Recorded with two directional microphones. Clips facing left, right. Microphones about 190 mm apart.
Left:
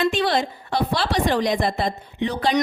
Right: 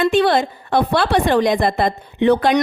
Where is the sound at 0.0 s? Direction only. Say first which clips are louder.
Right 6 dB; 55° right (ahead or behind).